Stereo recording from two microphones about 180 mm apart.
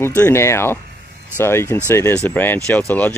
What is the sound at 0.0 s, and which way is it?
Speech, 10° left (ahead or behind).